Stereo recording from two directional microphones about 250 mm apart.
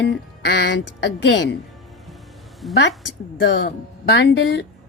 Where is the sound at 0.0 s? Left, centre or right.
Left.